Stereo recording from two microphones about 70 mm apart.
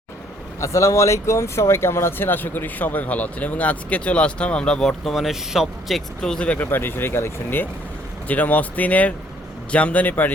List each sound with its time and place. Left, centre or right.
0.6 s speech: left; by 6.0 s centre
6.2 s speech: centre
6.7 s speech: left
8.3 s speech: left